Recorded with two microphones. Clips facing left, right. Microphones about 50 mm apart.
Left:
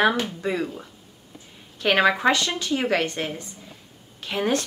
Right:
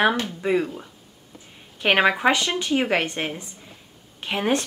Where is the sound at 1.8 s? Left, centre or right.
Centre.